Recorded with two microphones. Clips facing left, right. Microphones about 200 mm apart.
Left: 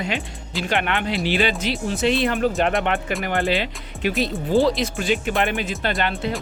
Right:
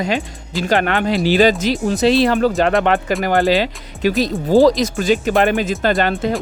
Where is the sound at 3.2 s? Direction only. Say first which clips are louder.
Right 8 dB; 35° right (ahead or behind).